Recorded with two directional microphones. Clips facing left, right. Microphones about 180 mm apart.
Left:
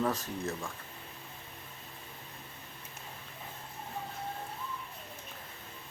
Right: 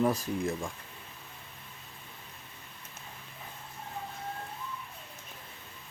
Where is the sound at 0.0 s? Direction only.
10° right (ahead or behind).